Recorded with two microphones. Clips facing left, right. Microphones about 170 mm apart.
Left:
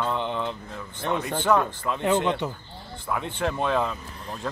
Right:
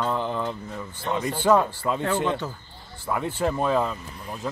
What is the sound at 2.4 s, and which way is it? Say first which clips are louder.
Speech: left 3 dB; 15° left (ahead or behind).